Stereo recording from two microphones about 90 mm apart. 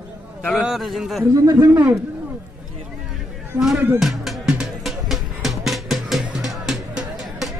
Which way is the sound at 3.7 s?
25° right (ahead or behind).